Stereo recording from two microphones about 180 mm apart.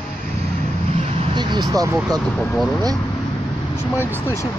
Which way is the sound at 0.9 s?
35° right (ahead or behind).